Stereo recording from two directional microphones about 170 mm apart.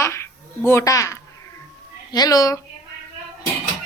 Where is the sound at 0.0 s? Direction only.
15° left (ahead or behind).